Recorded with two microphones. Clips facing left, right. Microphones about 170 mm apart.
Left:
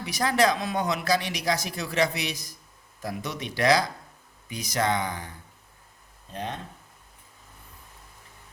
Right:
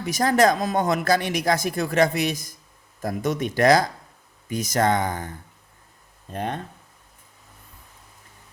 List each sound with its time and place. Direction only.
0.0 s speech: 45° right (ahead or behind)
6.3 s speech: 55° right (ahead or behind)